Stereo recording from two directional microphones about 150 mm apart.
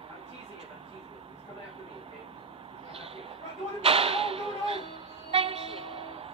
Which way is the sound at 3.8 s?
40° right (ahead or behind).